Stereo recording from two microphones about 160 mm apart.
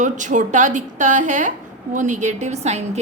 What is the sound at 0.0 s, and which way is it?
A woman's voice, 50° right (ahead or behind).